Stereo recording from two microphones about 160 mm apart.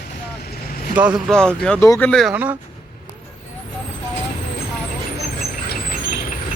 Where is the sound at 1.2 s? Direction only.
5° left (ahead or behind).